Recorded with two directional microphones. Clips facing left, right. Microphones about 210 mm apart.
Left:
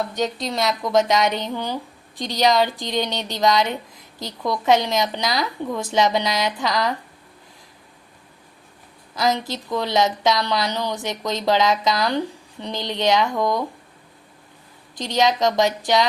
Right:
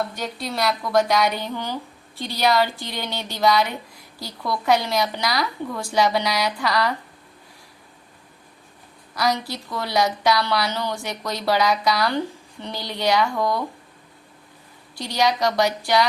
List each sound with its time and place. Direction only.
0.1 s a woman's voice: 20° left (ahead or behind)
9.3 s a woman's voice: 20° left (ahead or behind)
14.9 s a woman's voice: 20° left (ahead or behind)